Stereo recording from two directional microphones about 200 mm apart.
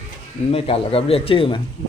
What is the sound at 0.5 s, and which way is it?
Speech, 30° left (ahead or behind).